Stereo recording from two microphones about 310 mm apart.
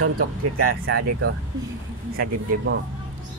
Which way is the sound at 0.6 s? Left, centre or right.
Right.